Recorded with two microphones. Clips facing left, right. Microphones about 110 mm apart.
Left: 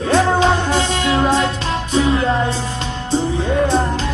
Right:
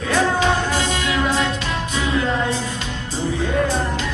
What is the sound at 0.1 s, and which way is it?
Music, 30° left (ahead or behind).